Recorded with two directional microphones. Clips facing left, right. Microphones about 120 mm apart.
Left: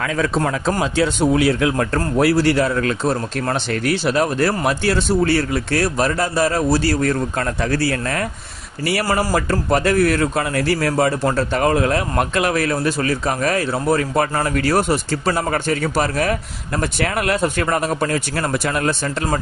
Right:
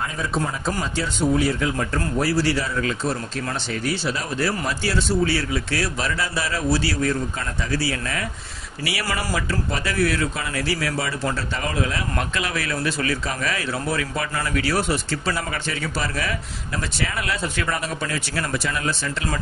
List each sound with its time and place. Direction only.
0.0 s a man's voice: 90° left; by 18.9 s 55° left (ahead or behind)